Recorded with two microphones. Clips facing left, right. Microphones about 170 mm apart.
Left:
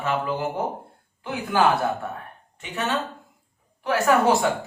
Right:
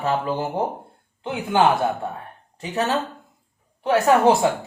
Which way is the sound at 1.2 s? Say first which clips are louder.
Right 2 dB; 25° right (ahead or behind).